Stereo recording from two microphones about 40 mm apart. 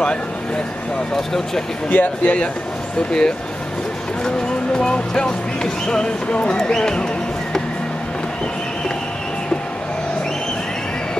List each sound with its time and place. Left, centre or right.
1.1 s speech: centre
1.9 s speech: left
3.1 s speech: left
4.7 s speech: left